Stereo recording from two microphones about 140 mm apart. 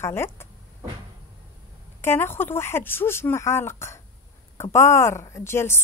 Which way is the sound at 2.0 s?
15° left (ahead or behind).